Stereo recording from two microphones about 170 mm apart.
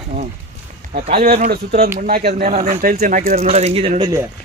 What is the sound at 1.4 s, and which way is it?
Speech, 65° right (ahead or behind).